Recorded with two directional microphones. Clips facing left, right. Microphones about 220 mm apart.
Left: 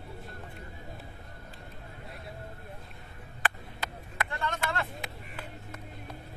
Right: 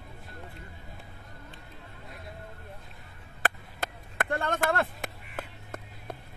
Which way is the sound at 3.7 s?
50° right (ahead or behind).